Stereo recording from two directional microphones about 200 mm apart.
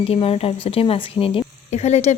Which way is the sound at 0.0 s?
30° left (ahead or behind).